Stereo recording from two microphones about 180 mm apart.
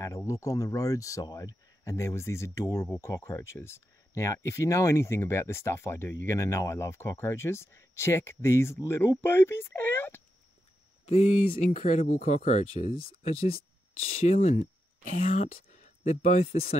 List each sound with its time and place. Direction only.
0.0 s speech: 15° left (ahead or behind)
11.1 s speech: 35° left (ahead or behind)
11.5 s speech: 50° left (ahead or behind)
13.9 s speech: 35° left (ahead or behind)